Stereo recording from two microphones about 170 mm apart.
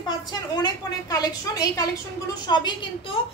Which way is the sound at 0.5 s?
25° left (ahead or behind).